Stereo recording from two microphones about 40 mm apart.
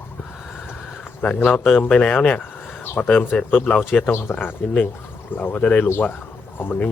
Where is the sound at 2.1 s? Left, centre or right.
Left.